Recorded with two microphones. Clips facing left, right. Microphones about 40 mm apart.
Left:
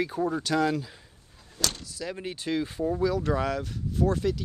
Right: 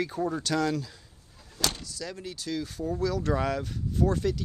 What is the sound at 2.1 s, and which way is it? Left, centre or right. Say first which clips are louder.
Speech: left 5 dB; left.